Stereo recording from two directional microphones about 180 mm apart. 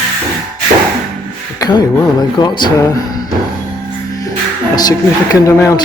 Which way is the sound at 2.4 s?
25° left (ahead or behind).